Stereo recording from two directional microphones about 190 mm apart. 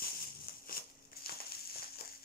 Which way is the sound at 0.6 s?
50° left (ahead or behind).